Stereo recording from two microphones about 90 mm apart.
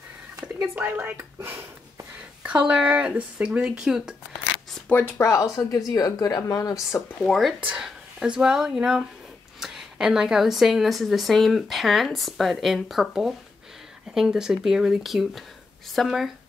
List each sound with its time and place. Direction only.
0.7 s speech: 20° right (ahead or behind)
4.8 s speech: 20° left (ahead or behind)
5.3 s speech: 35° left (ahead or behind)
7.2 s a woman's voice: centre (ahead or behind)